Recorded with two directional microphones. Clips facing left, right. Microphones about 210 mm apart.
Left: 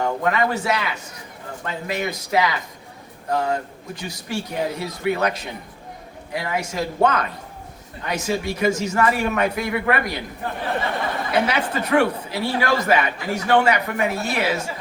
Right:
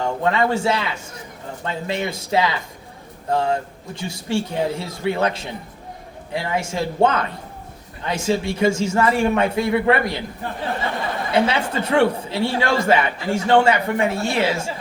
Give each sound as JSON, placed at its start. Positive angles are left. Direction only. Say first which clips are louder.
{"t": 0.0, "sound": "a man's voice", "louder": "right 1 dB", "side_deg": -25}
{"t": 11.3, "sound": "a man's voice", "louder": "right 3 dB", "side_deg": -25}